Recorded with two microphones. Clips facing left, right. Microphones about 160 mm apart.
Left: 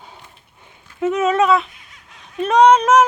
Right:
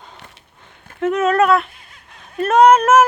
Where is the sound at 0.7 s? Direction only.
60° right (ahead or behind).